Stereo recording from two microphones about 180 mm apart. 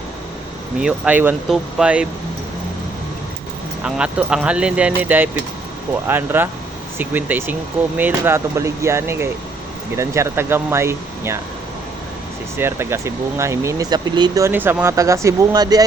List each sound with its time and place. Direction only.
0.8 s speech: 5° right (ahead or behind)
3.8 s speech: 5° right (ahead or behind)
12.5 s speech: 15° right (ahead or behind)